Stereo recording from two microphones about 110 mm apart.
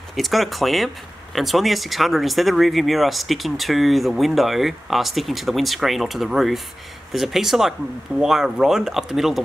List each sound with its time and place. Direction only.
0.1 s speech: centre (ahead or behind)